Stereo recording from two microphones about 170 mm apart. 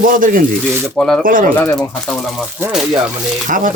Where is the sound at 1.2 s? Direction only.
50° right (ahead or behind).